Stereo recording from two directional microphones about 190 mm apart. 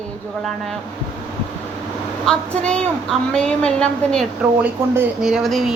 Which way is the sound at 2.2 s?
5° left (ahead or behind).